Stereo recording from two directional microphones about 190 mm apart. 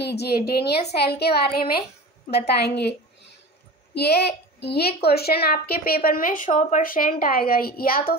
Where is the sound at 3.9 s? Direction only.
60° left (ahead or behind).